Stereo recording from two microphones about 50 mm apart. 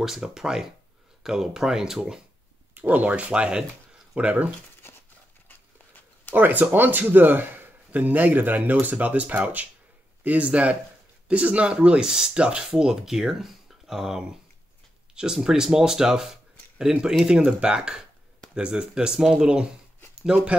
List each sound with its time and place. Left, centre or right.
0.0 s speech: centre
2.7 s speech: right
6.3 s speech: right; by 19.7 s centre